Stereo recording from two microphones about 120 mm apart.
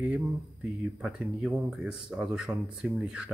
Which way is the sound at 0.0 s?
15° right (ahead or behind).